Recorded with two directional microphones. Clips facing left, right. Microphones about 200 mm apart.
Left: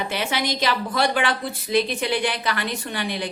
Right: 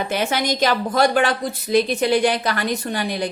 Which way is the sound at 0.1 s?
45° right (ahead or behind).